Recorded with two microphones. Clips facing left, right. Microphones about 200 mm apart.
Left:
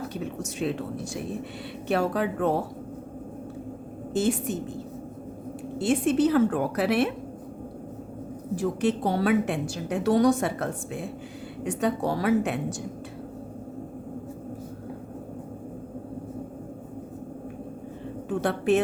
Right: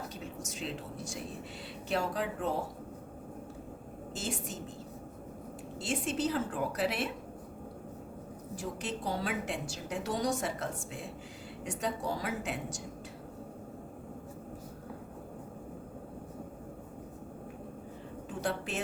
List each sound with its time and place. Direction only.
0.1 s a woman's voice: 65° left (ahead or behind)
4.1 s a woman's voice: 60° left (ahead or behind)
5.8 s a woman's voice: 60° left (ahead or behind)
8.5 s a woman's voice: 65° left (ahead or behind)
18.3 s a sound: 60° left (ahead or behind)